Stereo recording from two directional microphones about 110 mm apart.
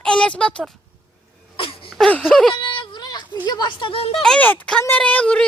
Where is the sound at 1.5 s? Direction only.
55° left (ahead or behind).